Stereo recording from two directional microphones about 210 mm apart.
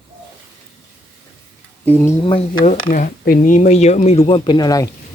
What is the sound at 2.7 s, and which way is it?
Speech, 40° left (ahead or behind).